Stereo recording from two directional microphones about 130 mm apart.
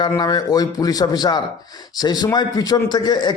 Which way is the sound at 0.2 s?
30° left (ahead or behind).